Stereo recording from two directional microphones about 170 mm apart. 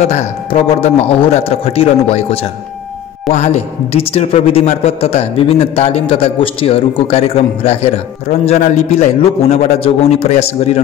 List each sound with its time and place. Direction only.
0.1 s a man's voice: 40° left (ahead or behind)